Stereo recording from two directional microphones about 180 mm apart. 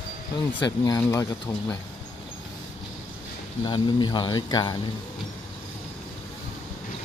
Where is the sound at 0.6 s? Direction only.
20° left (ahead or behind).